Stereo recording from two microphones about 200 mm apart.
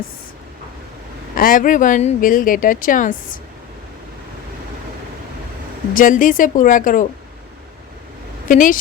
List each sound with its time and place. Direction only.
1.4 s speech: 45° left (ahead or behind)
5.9 s speech: 40° left (ahead or behind)
8.4 s speech: 40° left (ahead or behind)